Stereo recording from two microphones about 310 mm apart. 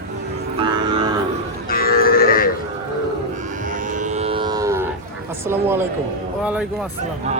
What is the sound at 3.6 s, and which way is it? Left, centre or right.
Cattle, right.